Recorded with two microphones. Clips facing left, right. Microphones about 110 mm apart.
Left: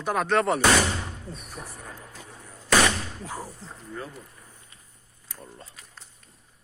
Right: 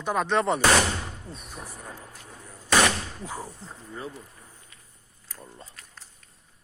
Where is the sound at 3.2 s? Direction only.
Centre (ahead or behind).